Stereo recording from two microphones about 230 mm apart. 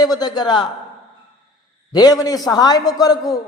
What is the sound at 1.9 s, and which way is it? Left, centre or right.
A man's voice, centre.